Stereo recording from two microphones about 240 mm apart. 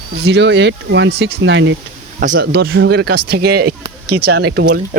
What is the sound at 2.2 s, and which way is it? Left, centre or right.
Speech, right.